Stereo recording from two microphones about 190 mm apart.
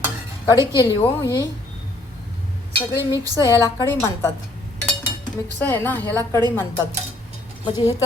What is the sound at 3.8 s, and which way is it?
Speech, 15° left (ahead or behind).